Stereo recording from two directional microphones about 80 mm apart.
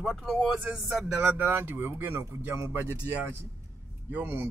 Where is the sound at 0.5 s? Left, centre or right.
Centre; by 2.9 s right.